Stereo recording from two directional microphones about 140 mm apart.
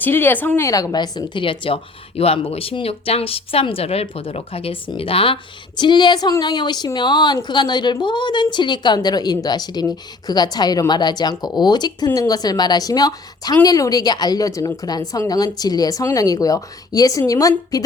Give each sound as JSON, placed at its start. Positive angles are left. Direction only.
{"t": 0.0, "sound": "a woman's voice", "side_deg": 15}